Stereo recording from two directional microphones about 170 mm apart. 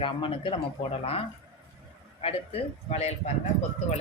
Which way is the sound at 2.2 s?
35° left (ahead or behind).